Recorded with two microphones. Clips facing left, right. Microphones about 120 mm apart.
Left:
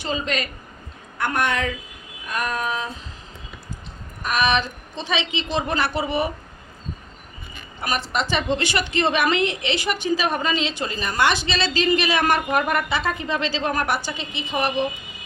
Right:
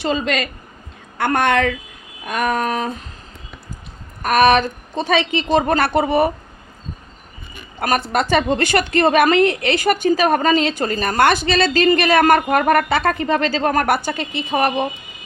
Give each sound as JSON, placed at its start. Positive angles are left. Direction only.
{"t": 0.0, "sound": "speech", "side_deg": -80}
{"t": 1.2, "sound": "child singing", "side_deg": -70}
{"t": 4.2, "sound": "a woman's voice", "side_deg": -50}
{"t": 7.9, "sound": "a woman's voice", "side_deg": -50}